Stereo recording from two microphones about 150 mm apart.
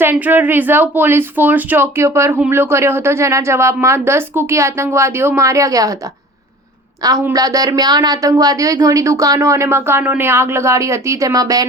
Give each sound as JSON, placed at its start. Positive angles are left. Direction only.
{"t": 0.0, "sound": "speech", "side_deg": -15}
{"t": 7.0, "sound": "speech", "side_deg": -25}